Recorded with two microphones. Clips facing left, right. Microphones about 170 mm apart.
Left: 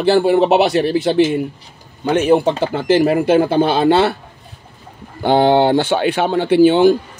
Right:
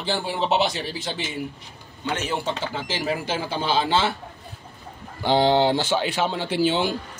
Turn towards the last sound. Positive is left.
turn(degrees=55)  # may be behind; listen again after turning